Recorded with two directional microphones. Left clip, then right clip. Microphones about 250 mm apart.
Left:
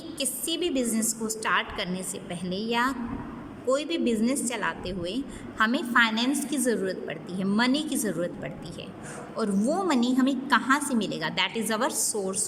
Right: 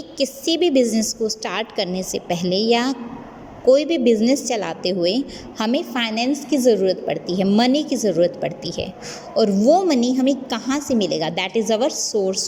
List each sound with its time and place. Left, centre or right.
0.2 s a woman's voice: centre